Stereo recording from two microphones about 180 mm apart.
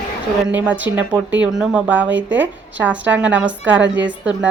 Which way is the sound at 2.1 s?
90° right.